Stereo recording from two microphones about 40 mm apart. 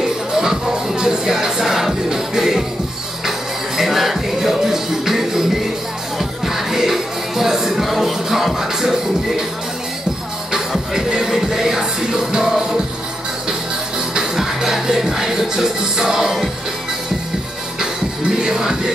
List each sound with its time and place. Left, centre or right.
0.0 s music: centre
10.5 s music: centre
14.3 s music: centre
18.4 s music: centre